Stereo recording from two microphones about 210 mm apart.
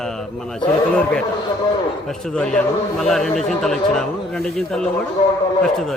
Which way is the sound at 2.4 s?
5° left (ahead or behind).